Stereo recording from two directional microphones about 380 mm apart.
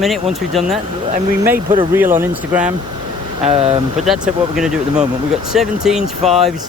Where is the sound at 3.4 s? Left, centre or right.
Centre.